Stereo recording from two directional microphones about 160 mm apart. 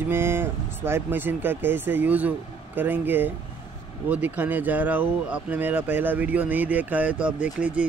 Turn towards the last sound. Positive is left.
turn(degrees=-5)  # may be behind; listen again after turning